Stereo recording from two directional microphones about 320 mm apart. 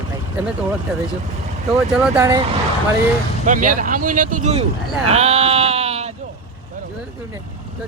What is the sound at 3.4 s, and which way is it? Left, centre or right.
Speech, right.